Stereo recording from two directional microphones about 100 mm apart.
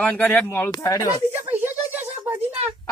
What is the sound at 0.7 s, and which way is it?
Speech, 40° left (ahead or behind).